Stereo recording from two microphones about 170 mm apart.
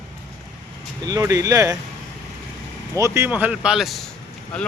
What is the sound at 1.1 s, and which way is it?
Speech, 20° right (ahead or behind).